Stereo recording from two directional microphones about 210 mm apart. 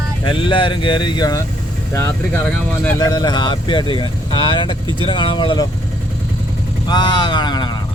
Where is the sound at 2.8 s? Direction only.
15° left (ahead or behind).